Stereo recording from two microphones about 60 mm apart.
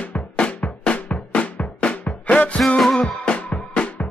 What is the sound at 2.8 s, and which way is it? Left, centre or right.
Music, centre.